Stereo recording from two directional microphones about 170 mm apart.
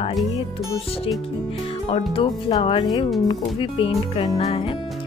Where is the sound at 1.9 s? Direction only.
35° left (ahead or behind).